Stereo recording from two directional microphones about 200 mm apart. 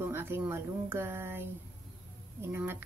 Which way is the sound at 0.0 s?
10° right (ahead or behind).